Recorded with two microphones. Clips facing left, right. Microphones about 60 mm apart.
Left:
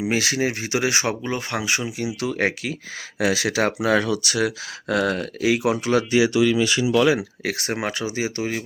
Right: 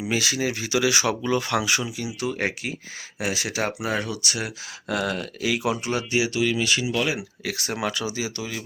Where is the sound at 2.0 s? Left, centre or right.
Left.